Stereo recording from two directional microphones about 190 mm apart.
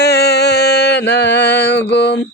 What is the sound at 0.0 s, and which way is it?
Mantra, 60° left (ahead or behind).